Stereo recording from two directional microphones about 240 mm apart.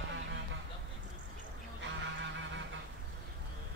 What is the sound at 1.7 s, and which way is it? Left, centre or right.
Goose, right.